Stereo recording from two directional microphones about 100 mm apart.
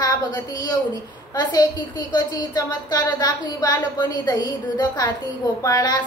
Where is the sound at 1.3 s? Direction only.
45° left (ahead or behind).